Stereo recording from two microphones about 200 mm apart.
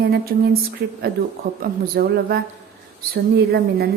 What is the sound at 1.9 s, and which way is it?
A woman's voice, 50° right (ahead or behind).